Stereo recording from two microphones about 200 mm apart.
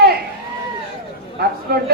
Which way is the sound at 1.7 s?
50° right (ahead or behind).